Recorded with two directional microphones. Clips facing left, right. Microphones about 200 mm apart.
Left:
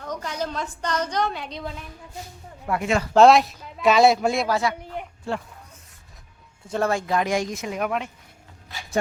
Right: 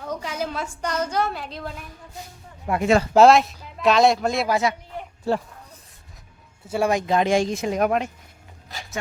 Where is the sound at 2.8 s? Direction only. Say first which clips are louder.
Right 6 dB; 35° right (ahead or behind).